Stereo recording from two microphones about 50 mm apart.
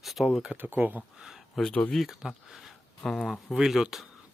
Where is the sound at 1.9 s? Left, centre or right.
Centre.